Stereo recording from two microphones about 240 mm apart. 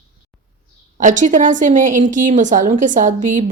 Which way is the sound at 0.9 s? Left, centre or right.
Right.